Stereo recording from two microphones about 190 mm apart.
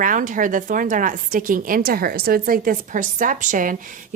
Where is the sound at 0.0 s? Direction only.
45° right (ahead or behind).